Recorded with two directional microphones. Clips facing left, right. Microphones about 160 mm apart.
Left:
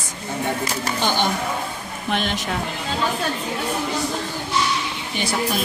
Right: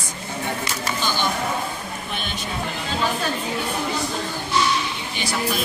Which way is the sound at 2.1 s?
90° left.